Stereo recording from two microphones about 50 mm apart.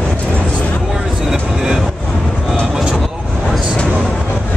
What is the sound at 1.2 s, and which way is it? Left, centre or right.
Vehicle, centre.